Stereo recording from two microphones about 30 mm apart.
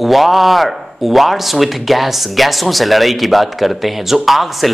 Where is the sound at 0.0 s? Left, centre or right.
Centre.